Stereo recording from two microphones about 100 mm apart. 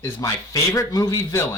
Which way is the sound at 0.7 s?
35° left (ahead or behind).